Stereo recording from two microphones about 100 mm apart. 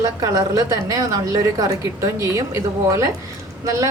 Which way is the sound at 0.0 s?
35° right (ahead or behind).